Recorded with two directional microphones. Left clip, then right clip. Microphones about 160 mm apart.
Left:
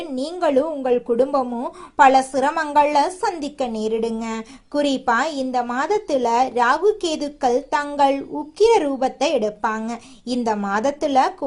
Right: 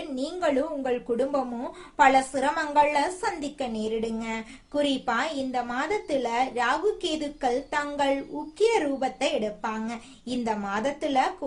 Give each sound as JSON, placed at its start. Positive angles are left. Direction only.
{"t": 0.2, "sound": "a woman's voice", "side_deg": 30}